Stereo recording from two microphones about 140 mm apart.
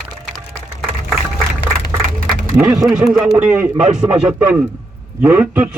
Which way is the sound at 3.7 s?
55° right (ahead or behind).